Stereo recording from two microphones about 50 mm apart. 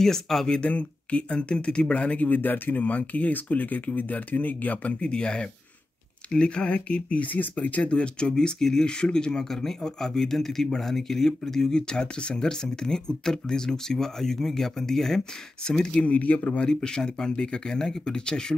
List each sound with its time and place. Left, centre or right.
0.0 s speech: centre
0.5 s speech: left
5.0 s a man's voice: centre
16.1 s a man's voice: left
16.6 s speech: centre